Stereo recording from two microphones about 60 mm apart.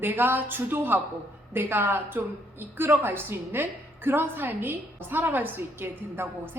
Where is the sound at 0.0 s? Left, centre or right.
Right.